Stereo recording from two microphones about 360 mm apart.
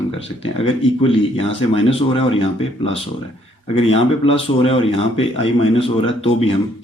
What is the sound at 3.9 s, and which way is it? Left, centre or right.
Speech, centre.